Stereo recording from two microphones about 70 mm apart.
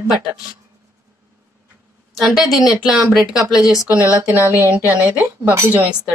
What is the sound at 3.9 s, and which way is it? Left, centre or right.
Speech, right.